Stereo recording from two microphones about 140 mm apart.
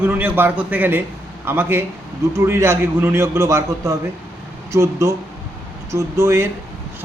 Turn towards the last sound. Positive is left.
turn(degrees=-20)  # may be behind; listen again after turning